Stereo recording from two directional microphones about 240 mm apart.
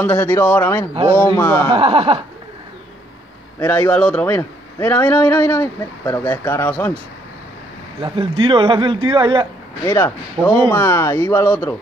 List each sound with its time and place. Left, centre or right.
0.0 s a man's voice: centre
1.7 s speech: right
3.5 s a man's voice: centre
8.0 s speech: right
9.8 s a man's voice: centre